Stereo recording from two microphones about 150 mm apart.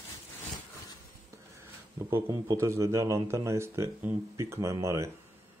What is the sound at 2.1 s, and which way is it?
Speech, 20° right (ahead or behind).